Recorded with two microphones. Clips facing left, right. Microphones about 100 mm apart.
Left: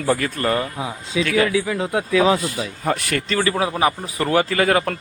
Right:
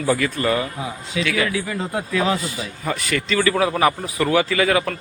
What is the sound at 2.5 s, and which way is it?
Speech, 55° left (ahead or behind).